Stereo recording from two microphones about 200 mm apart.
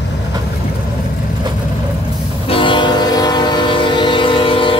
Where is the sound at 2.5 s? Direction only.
25° left (ahead or behind).